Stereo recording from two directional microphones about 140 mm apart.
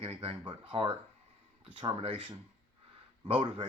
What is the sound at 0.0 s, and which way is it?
Speech, 45° right (ahead or behind).